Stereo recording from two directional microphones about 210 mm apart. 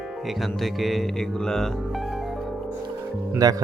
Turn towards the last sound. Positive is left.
turn(degrees=-15)  # may be behind; listen again after turning